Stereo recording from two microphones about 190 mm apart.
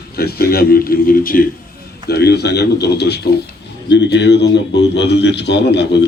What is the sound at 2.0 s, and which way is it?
A man's voice, 60° left (ahead or behind).